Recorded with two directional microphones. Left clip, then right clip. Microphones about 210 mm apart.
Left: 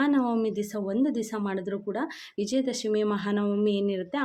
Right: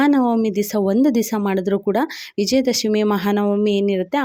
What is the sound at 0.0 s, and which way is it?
Speech, 35° right (ahead or behind).